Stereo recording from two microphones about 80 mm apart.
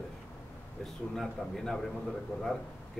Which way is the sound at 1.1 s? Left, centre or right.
Centre.